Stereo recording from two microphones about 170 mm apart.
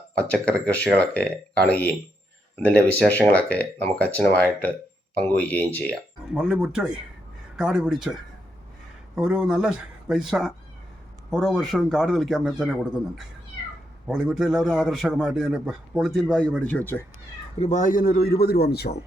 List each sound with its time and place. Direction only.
0.2 s speech: 10° left (ahead or behind)
6.3 s a man's voice: 5° right (ahead or behind)
14.1 s a man's voice: 5° right (ahead or behind)
17.6 s speech: 45° left (ahead or behind); by 18.9 s 70° left (ahead or behind)